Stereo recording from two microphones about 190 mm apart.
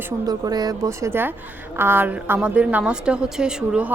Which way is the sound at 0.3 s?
20° right (ahead or behind).